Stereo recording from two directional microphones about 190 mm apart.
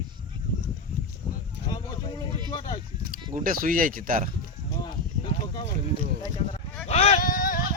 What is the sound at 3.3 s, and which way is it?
Speech, 45° right (ahead or behind).